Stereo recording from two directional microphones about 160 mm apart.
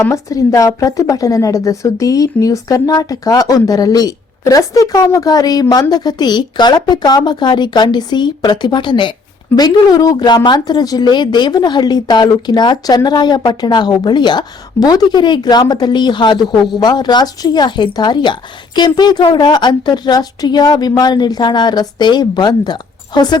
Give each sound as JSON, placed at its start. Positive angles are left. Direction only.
{"t": 0.0, "sound": "speech", "side_deg": 20}